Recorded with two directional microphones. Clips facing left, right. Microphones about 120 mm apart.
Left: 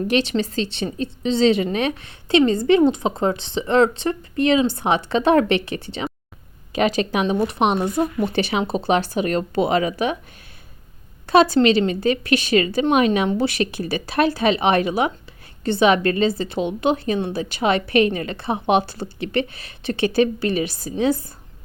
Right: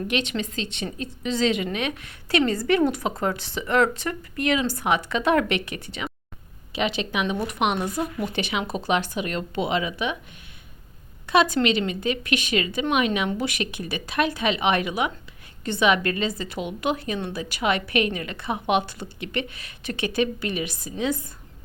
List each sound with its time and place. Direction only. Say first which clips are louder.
0.1 s a woman's voice: left 7 dB; 35° left (ahead or behind)
6.7 s a woman's voice: left 6 dB; 45° left (ahead or behind)
7.3 s a woman's voice: left 6 dB; 30° left (ahead or behind)
11.3 s a woman's voice: left 6 dB; 35° left (ahead or behind)